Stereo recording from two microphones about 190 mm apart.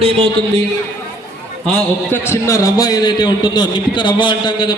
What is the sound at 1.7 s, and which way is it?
A man's voice, 10° left (ahead or behind).